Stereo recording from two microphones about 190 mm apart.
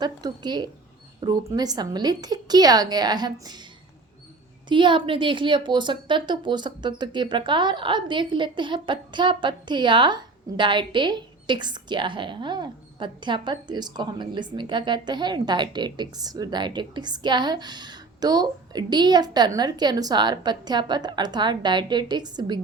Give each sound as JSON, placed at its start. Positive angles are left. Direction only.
{"t": 0.0, "sound": "a woman's voice", "side_deg": -20}
{"t": 4.7, "sound": "a woman's voice", "side_deg": -25}